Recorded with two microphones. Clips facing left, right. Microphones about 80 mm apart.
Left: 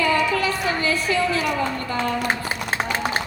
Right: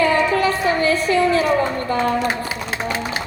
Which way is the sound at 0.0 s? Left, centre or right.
Right.